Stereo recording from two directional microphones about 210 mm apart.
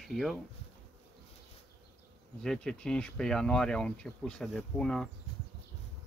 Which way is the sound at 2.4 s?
5° left (ahead or behind).